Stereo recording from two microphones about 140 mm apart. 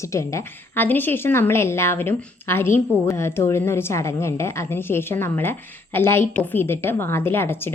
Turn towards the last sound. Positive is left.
turn(degrees=15)  # may be behind; listen again after turning